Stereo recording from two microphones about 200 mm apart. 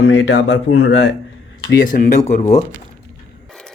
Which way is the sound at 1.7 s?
40° left (ahead or behind).